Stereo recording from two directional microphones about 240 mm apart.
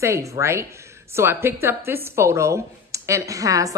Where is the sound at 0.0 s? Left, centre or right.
Centre.